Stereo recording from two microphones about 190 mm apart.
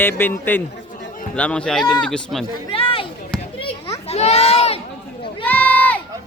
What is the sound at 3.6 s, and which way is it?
Children playing, 30° left (ahead or behind).